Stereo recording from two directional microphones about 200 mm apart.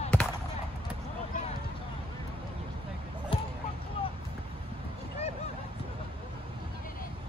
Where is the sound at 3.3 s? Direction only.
25° left (ahead or behind).